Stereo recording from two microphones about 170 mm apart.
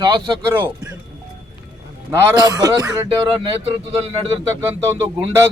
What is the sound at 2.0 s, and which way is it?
A man's voice, 15° right (ahead or behind).